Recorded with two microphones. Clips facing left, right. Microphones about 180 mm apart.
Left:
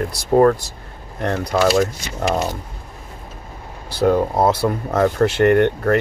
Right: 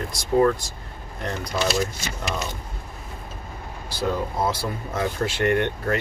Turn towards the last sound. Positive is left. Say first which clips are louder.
# left 8 dB
turn(degrees=55)  # may be behind; listen again after turning